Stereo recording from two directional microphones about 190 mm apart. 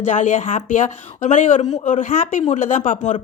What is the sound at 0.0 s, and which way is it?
A man's voice, 40° left (ahead or behind).